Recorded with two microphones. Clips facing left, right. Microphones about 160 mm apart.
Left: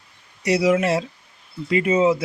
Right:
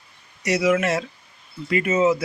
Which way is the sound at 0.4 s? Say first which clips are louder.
Left 2 dB; 30° left (ahead or behind).